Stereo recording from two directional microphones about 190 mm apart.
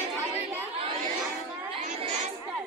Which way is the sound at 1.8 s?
40° right (ahead or behind).